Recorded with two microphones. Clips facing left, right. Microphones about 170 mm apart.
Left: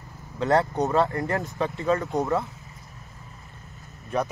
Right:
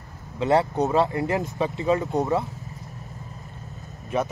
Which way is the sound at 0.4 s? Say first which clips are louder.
Right 1 dB; centre (ahead or behind).